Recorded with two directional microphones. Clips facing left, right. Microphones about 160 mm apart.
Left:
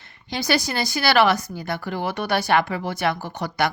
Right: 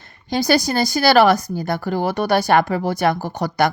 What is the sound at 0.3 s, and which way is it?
A woman's voice, 40° right (ahead or behind).